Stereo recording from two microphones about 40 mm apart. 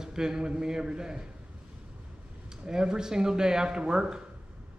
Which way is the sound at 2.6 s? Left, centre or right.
Centre.